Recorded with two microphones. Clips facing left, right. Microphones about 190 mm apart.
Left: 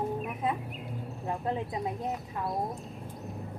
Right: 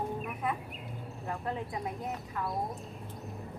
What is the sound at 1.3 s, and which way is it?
Speech, 20° left (ahead or behind).